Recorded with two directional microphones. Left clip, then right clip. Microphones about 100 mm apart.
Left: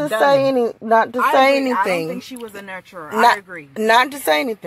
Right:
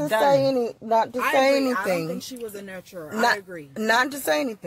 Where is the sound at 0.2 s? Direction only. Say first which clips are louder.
Left 6 dB; 90° left.